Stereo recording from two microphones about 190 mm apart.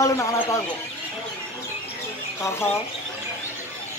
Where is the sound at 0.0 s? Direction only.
15° left (ahead or behind).